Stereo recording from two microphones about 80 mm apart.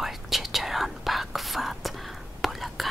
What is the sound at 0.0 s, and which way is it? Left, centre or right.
Whispering, centre.